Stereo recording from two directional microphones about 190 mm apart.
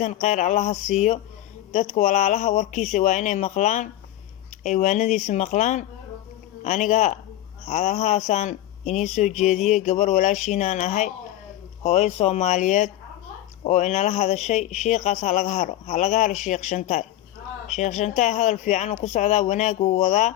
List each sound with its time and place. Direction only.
0.0 s speech: 40° left (ahead or behind)